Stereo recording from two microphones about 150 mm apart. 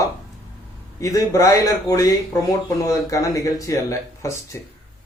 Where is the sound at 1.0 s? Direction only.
20° left (ahead or behind).